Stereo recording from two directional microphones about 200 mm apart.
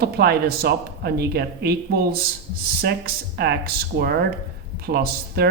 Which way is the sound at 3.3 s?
50° right (ahead or behind).